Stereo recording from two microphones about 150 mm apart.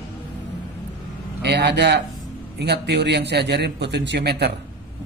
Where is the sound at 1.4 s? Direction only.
90° right.